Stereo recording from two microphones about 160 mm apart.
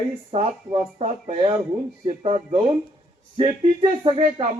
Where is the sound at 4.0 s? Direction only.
35° right (ahead or behind).